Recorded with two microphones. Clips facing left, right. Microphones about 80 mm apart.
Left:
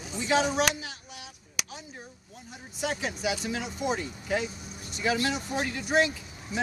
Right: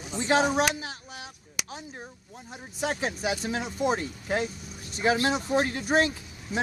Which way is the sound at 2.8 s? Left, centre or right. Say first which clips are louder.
Right 2 dB; right.